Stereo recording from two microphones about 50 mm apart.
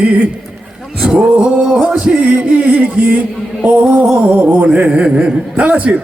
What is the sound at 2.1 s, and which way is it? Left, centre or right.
Music, right.